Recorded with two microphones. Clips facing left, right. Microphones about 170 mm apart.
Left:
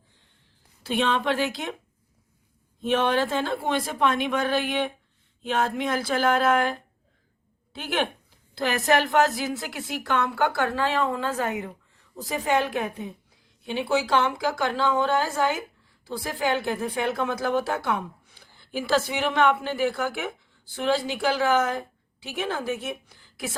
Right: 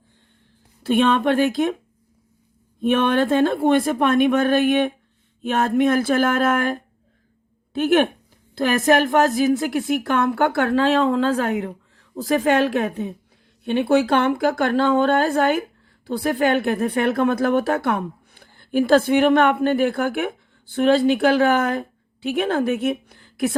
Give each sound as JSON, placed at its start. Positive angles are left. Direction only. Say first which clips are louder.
{"t": 0.8, "sound": "speech", "louder": "right 7 dB", "side_deg": -55}
{"t": 2.8, "sound": "a woman's voice", "louder": "right 5 dB", "side_deg": -55}